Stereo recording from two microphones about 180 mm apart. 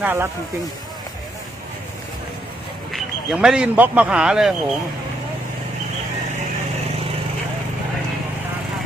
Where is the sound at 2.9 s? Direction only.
Centre (ahead or behind).